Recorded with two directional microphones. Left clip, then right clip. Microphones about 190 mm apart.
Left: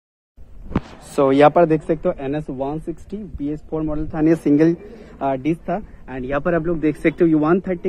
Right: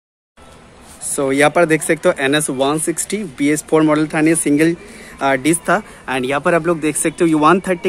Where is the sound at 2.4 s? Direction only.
40° right (ahead or behind).